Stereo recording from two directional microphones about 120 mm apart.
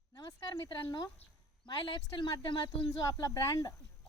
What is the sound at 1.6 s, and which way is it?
Speech, 40° left (ahead or behind).